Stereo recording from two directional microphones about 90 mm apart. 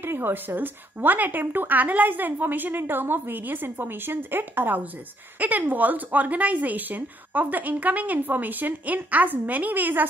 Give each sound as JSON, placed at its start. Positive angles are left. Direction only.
{"t": 0.0, "sound": "speech", "side_deg": -25}